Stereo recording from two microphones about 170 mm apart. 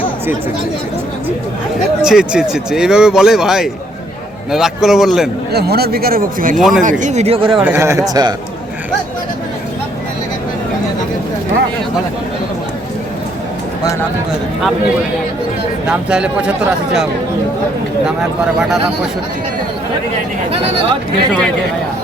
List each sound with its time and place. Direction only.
2.0 s speech: 5° right (ahead or behind)
5.5 s speech: 70° right (ahead or behind)
6.6 s speech: 5° right (ahead or behind)
7.0 s speech: 40° right (ahead or behind)
7.6 s speech: 15° right (ahead or behind)
15.9 s speech: 5° right (ahead or behind)